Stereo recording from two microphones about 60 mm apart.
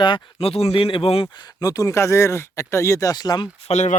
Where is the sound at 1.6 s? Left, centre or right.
Left.